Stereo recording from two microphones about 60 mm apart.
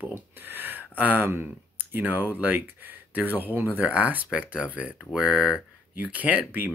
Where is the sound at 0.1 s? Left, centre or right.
Right.